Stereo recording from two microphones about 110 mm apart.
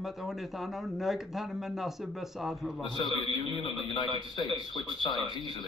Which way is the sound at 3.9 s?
40° left (ahead or behind).